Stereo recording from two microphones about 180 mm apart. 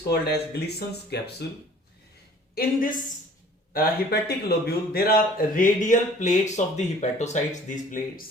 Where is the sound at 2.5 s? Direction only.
50° left (ahead or behind).